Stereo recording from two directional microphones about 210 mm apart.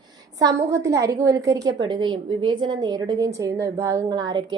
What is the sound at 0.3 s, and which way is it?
A woman's voice, 15° right (ahead or behind).